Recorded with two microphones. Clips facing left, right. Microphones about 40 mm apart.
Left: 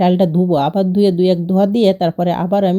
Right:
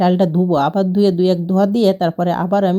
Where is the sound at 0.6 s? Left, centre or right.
Left.